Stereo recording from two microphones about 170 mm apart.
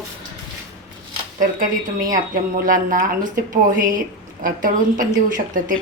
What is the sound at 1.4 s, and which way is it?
A woman's voice, 50° right (ahead or behind).